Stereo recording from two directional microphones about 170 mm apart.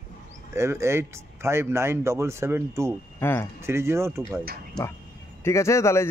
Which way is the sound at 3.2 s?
15° left (ahead or behind).